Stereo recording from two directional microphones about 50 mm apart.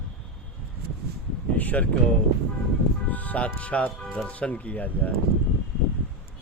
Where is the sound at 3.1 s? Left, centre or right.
Left.